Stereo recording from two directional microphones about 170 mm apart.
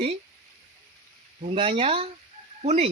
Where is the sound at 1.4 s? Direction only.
35° right (ahead or behind).